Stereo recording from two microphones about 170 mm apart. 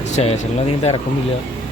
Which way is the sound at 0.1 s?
40° left (ahead or behind).